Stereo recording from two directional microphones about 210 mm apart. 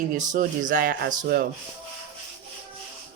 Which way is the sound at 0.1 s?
40° right (ahead or behind).